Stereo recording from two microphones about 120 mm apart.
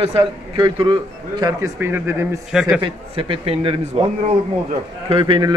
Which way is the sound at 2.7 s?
45° right (ahead or behind).